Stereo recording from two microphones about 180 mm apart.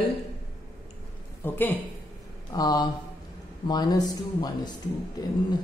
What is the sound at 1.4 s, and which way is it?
Speech, 10° left (ahead or behind).